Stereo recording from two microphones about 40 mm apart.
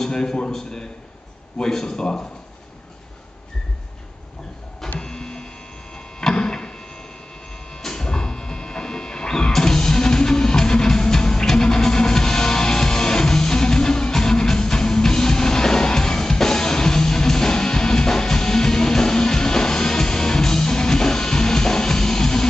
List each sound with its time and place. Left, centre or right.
0.0 s a man's voice: centre
5.0 s printer: centre
6.3 s a sound: centre
7.7 s music: centre